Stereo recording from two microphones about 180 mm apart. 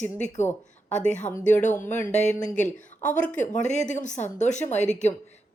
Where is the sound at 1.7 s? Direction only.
15° left (ahead or behind).